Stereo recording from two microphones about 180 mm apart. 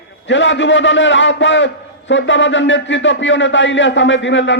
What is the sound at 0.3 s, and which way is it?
A man's voice, 90° left.